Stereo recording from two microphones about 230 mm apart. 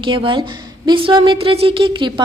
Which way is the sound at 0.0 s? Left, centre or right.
Right.